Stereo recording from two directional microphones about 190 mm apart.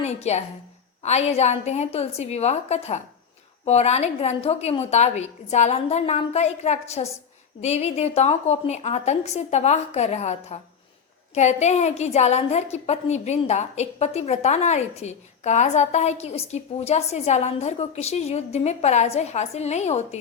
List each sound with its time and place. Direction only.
0.0 s a woman's voice: 35° left (ahead or behind)